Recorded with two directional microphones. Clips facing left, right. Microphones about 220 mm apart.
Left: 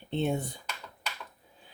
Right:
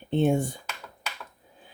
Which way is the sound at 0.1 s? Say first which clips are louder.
Right 7 dB; 50° right (ahead or behind).